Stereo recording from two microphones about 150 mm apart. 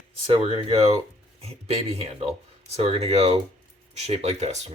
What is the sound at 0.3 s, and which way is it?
A man's voice, 40° right (ahead or behind).